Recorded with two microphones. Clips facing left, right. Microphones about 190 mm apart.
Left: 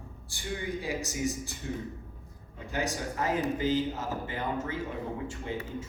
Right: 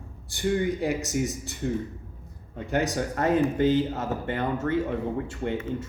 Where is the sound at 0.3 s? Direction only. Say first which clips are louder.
Right 10 dB; 60° right (ahead or behind).